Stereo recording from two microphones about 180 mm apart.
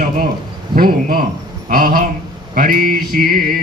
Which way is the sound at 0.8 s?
55° right (ahead or behind).